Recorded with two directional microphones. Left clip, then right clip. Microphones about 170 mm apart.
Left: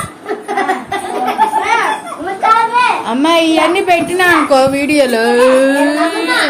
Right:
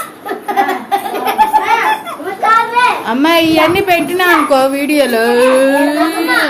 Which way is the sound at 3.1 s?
Centre (ahead or behind).